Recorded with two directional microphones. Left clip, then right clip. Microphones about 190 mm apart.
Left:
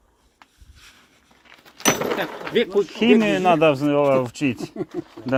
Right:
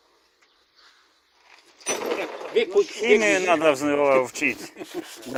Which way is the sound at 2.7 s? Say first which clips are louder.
Even; 30° left (ahead or behind).